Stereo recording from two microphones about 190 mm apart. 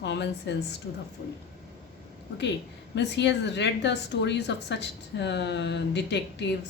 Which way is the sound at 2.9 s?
65° left (ahead or behind).